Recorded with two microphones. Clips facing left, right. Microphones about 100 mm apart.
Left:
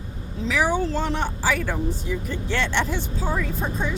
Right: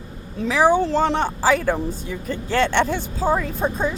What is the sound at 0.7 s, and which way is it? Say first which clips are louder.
Speech: right 6 dB; 50° right (ahead or behind).